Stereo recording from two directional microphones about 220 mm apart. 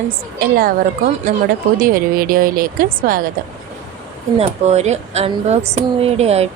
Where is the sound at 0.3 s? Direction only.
40° right (ahead or behind).